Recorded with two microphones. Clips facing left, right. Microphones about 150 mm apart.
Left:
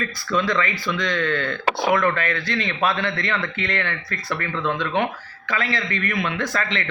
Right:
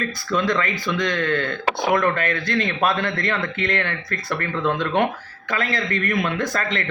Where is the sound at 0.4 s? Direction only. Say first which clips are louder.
Right 1 dB; 50° right (ahead or behind).